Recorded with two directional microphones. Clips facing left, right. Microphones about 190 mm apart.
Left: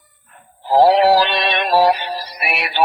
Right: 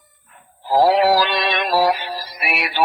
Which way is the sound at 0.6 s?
25° left (ahead or behind).